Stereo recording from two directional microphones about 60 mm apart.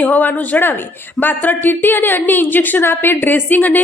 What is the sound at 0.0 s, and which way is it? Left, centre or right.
A woman's voice, left.